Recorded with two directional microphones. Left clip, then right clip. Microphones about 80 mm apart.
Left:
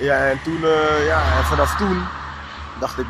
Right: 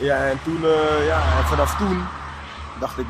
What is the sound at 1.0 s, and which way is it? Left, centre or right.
Speech, left.